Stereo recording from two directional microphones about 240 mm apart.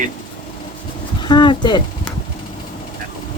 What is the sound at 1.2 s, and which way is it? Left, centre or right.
Speech, centre.